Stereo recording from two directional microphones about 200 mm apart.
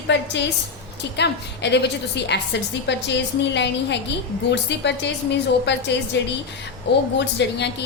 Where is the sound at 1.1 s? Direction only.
60° left (ahead or behind).